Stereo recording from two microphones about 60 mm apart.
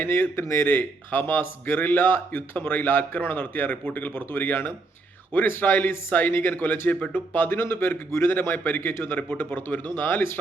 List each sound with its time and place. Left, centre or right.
0.0 s speech: left